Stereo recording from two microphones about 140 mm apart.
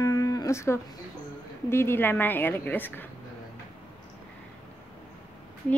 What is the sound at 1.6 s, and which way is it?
A woman's voice, 20° left (ahead or behind).